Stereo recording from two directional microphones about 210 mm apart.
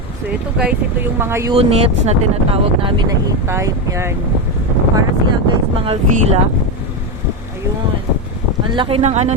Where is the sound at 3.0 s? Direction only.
15° right (ahead or behind).